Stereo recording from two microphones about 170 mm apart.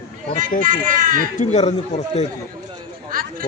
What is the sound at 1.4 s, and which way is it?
Speech, 40° left (ahead or behind).